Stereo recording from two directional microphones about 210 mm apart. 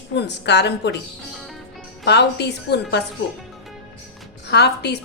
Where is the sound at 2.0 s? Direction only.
55° left (ahead or behind).